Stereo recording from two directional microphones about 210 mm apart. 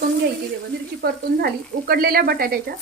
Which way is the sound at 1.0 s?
45° right (ahead or behind).